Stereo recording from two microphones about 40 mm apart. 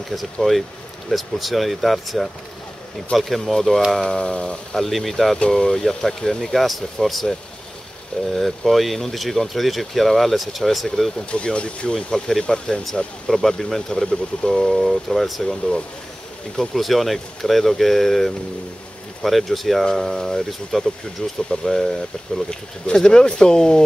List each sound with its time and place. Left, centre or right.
0.1 s speech: centre
4.2 s speech: left
4.7 s speech: centre
11.1 s speech: left
11.9 s speech: centre
14.7 s speech: centre
15.4 s speech: centre
16.5 s speech: centre
22.5 s speech: centre